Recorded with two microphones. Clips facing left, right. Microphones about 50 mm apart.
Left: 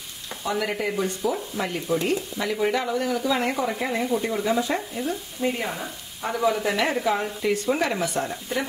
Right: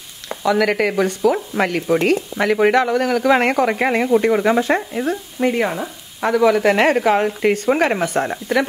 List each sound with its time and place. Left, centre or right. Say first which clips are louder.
0.5 s sizzle: right 9 dB; right
1.5 s a man's voice: right 8 dB; right
2.3 s a man's voice: right 9 dB; right
5.4 s sizzle: right 7 dB; right
6.2 s speech: right 9 dB; right